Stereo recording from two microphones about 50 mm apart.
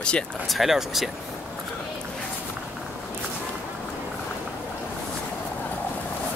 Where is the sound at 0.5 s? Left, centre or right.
Centre.